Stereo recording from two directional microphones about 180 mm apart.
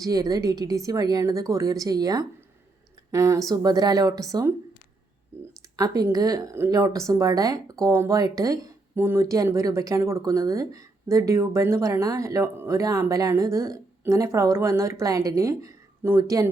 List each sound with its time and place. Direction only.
0.0 s a woman's voice: 20° right (ahead or behind)
5.7 s a woman's voice: 20° right (ahead or behind)